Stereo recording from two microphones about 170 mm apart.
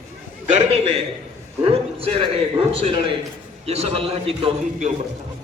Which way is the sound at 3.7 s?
35° right (ahead or behind).